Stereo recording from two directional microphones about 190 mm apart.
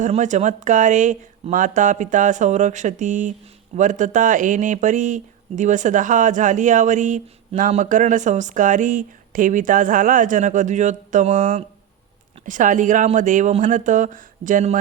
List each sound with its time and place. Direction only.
0.0 s speech: 40° right (ahead or behind)